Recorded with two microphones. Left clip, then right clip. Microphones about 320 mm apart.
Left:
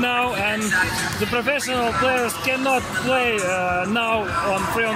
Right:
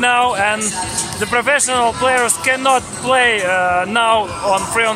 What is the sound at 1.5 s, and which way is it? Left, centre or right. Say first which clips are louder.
Speech: right 9 dB; right.